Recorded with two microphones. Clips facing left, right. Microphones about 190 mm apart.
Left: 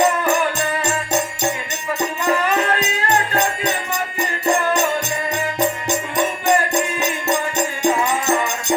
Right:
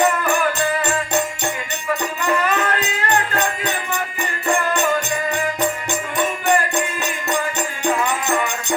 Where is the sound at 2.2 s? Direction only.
20° left (ahead or behind).